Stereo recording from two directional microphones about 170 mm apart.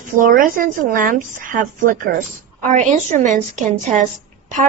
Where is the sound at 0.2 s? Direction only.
55° right (ahead or behind).